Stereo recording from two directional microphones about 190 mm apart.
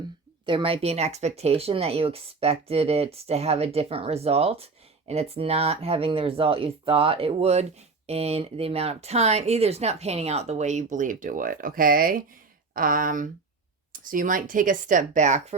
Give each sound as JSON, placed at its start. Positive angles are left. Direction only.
{"t": 0.4, "sound": "speech", "side_deg": -25}